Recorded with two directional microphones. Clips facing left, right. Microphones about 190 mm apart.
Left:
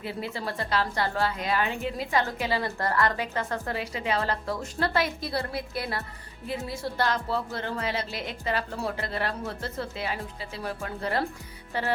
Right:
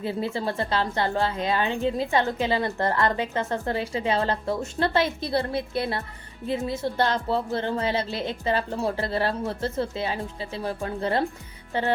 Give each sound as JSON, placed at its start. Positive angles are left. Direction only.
{"t": 0.0, "sound": "a woman's voice", "side_deg": -25}